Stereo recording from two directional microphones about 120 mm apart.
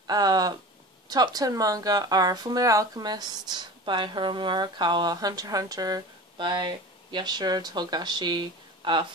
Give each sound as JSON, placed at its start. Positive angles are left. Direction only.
{"t": 0.0, "sound": "speech", "side_deg": -35}